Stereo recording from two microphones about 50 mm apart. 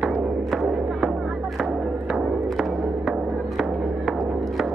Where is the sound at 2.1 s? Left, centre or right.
Centre.